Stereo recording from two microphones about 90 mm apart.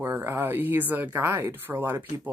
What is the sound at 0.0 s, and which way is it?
Speech, 25° right (ahead or behind).